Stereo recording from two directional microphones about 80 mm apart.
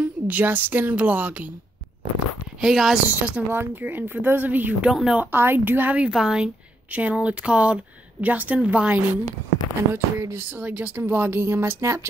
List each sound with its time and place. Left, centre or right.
0.0 s speech: right
2.6 s speech: centre
3.2 s speech: right
4.8 s speech: centre
5.2 s speech: right
9.9 s speech: right